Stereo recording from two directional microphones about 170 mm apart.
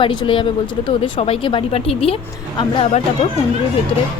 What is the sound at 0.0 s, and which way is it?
Speech, 30° left (ahead or behind).